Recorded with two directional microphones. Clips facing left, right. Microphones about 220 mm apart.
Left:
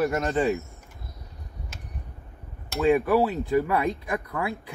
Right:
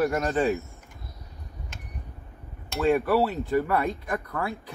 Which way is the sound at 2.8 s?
15° left (ahead or behind).